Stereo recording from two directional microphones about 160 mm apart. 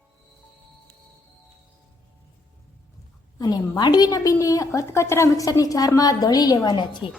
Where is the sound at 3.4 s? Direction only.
25° left (ahead or behind).